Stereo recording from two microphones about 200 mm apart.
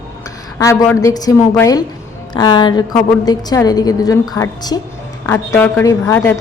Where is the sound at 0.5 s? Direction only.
15° left (ahead or behind).